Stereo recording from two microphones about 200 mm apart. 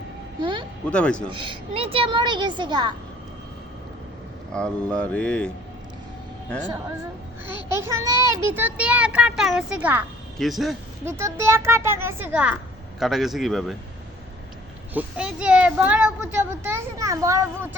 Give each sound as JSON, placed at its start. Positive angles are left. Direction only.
{"t": 0.9, "sound": "mantra", "side_deg": 5}
{"t": 1.3, "sound": "a woman's voice", "side_deg": -25}
{"t": 4.5, "sound": "mantra", "side_deg": 5}
{"t": 7.4, "sound": "a child's voice", "side_deg": -15}
{"t": 11.0, "sound": "a child's voice", "side_deg": -10}
{"t": 13.0, "sound": "mantra", "side_deg": 0}
{"t": 14.9, "sound": "a child's voice", "side_deg": -5}